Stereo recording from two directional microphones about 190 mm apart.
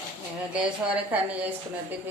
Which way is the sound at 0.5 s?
10° right (ahead or behind).